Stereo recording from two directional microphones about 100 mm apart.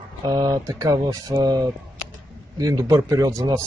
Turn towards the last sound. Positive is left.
turn(degrees=-30)  # may be behind; listen again after turning